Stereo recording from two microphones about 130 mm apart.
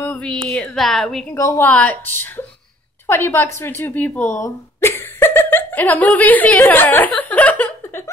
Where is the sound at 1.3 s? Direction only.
20° left (ahead or behind).